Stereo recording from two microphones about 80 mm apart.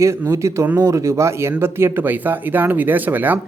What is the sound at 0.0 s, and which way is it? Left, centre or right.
Speech, right.